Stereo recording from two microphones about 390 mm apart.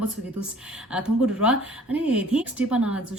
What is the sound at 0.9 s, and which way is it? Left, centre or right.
Speech, centre.